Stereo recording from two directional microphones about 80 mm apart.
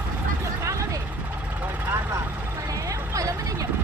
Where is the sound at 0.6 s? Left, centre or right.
Right.